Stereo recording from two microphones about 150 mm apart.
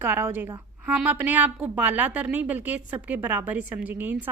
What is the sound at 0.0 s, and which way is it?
A woman's voice, 15° right (ahead or behind).